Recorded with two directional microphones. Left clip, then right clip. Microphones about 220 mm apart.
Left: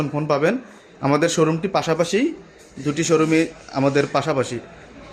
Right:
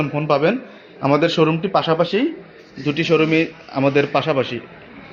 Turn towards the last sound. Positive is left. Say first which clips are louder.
# right 2 dB
turn(degrees=20)  # may be behind; listen again after turning